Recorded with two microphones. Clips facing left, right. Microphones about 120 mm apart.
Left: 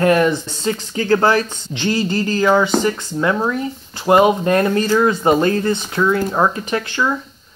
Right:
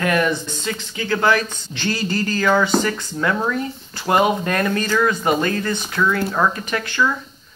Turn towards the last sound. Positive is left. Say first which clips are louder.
# left 1 dB
turn(degrees=25)  # may be behind; listen again after turning